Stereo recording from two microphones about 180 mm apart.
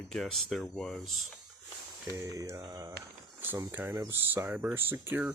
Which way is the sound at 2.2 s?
15° right (ahead or behind).